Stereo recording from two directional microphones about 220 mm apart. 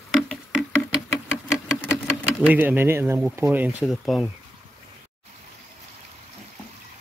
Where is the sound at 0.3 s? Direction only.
Centre (ahead or behind).